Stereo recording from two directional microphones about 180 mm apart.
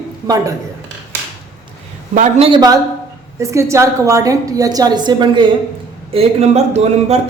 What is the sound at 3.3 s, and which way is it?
A woman's voice, 15° right (ahead or behind).